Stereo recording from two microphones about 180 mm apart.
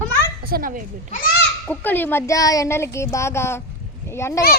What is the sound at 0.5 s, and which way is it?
Speech, 50° right (ahead or behind).